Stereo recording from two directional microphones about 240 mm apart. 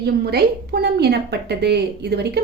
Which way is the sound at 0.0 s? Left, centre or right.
Right.